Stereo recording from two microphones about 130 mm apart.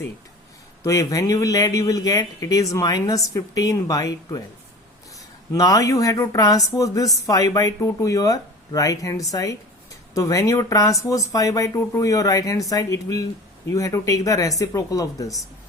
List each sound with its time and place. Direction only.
0.9 s speech: 25° left (ahead or behind)
5.5 s speech: 25° left (ahead or behind)